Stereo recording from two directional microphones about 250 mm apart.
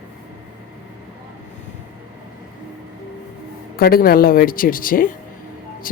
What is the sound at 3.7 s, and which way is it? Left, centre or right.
A woman's voice, left.